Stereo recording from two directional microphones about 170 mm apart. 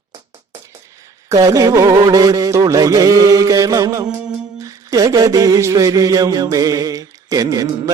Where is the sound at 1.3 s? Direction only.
20° right (ahead or behind).